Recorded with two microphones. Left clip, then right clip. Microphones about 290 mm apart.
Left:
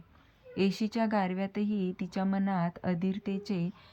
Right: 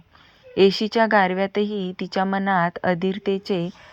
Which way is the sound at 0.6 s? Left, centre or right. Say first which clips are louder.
Right 14 dB; right.